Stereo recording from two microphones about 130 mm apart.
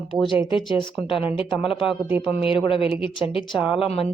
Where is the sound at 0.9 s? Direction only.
45° left (ahead or behind).